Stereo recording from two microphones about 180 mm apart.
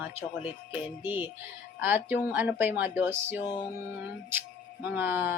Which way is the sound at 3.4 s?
20° left (ahead or behind).